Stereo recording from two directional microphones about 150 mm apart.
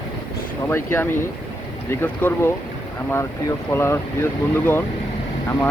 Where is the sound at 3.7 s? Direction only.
15° left (ahead or behind).